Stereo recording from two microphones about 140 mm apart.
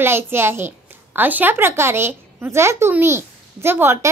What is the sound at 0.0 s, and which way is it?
A child's voice, 15° right (ahead or behind).